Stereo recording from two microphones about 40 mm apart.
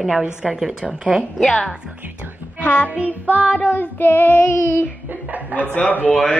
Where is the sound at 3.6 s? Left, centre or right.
Left.